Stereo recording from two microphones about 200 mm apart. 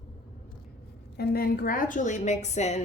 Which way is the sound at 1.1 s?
50° left (ahead or behind).